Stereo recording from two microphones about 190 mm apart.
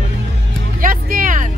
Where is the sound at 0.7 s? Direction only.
45° right (ahead or behind).